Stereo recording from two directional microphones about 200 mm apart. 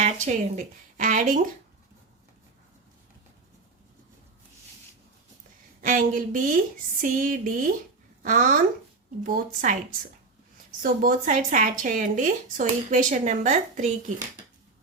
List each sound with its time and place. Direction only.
0.0 s speech: 35° right (ahead or behind)
5.8 s a woman's voice: 40° right (ahead or behind)
10.8 s speech: 45° right (ahead or behind)